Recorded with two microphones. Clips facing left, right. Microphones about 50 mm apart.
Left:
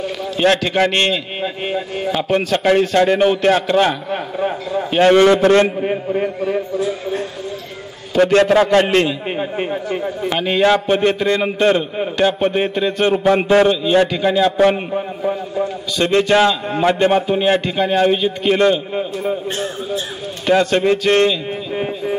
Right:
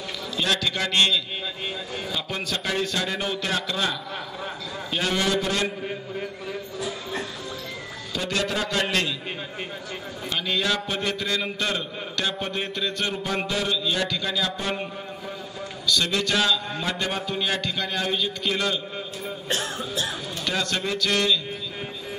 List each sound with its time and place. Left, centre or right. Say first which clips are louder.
0.4 s a man's voice: left 11 dB; left
8.6 s a man's voice: left 11 dB; left
20.4 s a man's voice: left 13 dB; left